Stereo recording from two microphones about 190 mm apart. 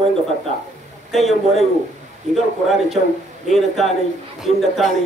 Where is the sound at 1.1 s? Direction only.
Centre (ahead or behind).